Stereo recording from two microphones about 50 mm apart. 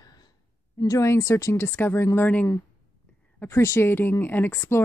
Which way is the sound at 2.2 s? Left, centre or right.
Left.